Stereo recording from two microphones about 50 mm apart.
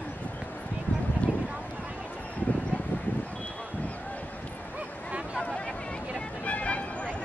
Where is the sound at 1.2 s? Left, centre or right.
Left.